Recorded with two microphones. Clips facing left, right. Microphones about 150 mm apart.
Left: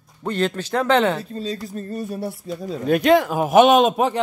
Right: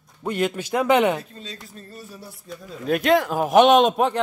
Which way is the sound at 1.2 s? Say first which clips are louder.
Left 10 dB; 35° left (ahead or behind).